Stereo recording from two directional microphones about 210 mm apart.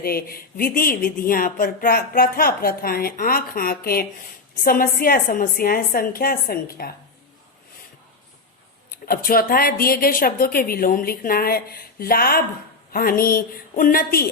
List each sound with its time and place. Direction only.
0.0 s speech: 45° left (ahead or behind)
9.0 s speech: 45° left (ahead or behind)